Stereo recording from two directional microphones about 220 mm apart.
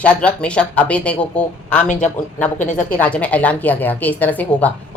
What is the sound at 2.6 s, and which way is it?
Speech, 35° left (ahead or behind).